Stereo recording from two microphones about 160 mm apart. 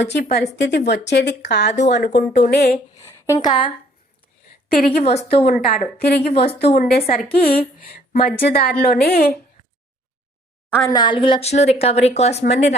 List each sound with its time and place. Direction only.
0.0 s a woman's voice: 90° left
2.0 s speech: 50° left (ahead or behind)
2.5 s a woman's voice: 75° left (ahead or behind)
3.2 s speech: 25° left (ahead or behind)
4.7 s a woman's voice: 65° left (ahead or behind)
5.0 s speech: 40° left (ahead or behind)
6.0 s speech: 85° left
6.3 s speech: 40° left (ahead or behind)
6.8 s a woman's voice: 70° left (ahead or behind)
10.8 s speech: 25° left (ahead or behind); by 12.4 s 40° left (ahead or behind)